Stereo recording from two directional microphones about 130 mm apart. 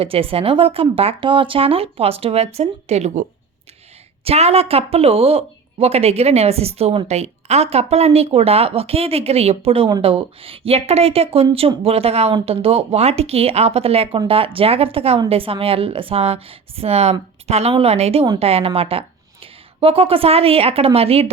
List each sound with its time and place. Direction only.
0.0 s a woman's voice: 45° right (ahead or behind)